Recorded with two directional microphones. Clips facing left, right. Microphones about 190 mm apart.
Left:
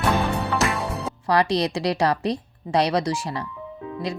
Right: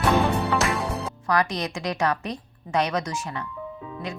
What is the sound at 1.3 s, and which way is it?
Speech, 30° left (ahead or behind).